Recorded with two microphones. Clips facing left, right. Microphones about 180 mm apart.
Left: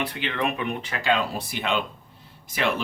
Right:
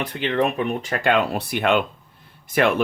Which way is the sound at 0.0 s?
45° right (ahead or behind).